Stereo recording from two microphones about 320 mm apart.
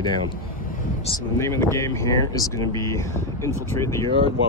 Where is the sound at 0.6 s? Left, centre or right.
Left.